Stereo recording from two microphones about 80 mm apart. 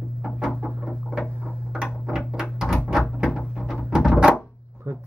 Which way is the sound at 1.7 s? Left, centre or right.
Centre.